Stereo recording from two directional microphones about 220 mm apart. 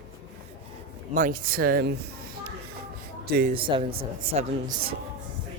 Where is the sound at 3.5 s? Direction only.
25° right (ahead or behind).